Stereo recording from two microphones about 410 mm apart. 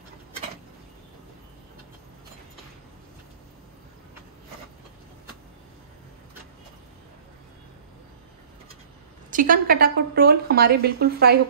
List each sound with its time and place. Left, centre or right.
9.3 s a woman's voice: centre